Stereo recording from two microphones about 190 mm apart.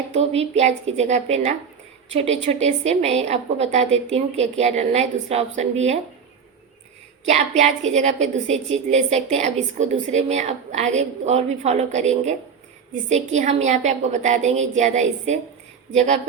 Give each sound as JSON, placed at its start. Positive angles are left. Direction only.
{"t": 0.1, "sound": "a woman's voice", "side_deg": -35}
{"t": 7.3, "sound": "a woman's voice", "side_deg": -35}